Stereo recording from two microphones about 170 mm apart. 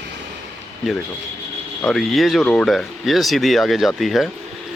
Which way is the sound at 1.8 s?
Centre (ahead or behind).